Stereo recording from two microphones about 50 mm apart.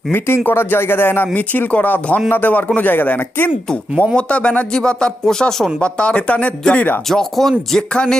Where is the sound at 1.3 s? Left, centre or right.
Left.